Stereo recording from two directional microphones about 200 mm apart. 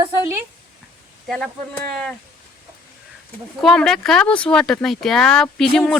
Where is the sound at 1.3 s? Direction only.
Centre (ahead or behind).